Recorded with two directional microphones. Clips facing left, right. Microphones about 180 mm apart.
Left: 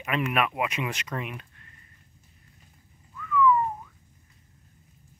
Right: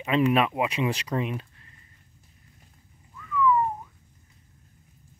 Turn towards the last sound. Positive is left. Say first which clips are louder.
# left 2 dB
turn(degrees=-25)  # may be behind; listen again after turning